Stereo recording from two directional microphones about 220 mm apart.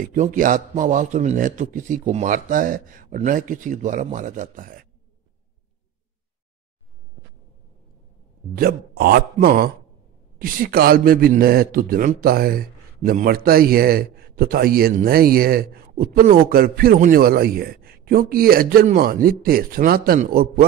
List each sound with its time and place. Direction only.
0.1 s a man's voice: 35° right (ahead or behind)
8.5 s a man's voice: 45° right (ahead or behind)